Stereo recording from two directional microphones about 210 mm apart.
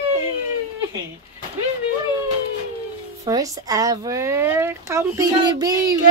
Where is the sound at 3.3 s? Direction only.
15° right (ahead or behind).